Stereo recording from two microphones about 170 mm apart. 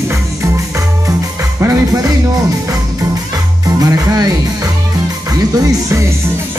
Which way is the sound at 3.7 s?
20° right (ahead or behind).